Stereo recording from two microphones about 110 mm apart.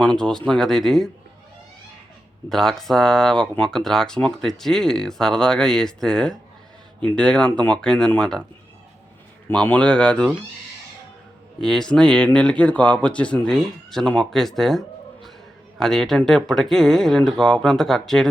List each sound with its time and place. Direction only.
0.2 s speech: 5° left (ahead or behind)
2.5 s speech: 5° left (ahead or behind)
9.5 s speech: 10° left (ahead or behind)
11.6 s speech: 5° left (ahead or behind)